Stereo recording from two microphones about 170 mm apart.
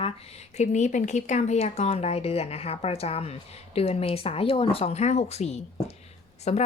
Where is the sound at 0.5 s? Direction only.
45° left (ahead or behind).